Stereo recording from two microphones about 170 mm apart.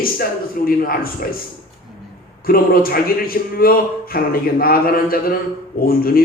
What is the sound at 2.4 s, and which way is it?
Speech, 60° left (ahead or behind).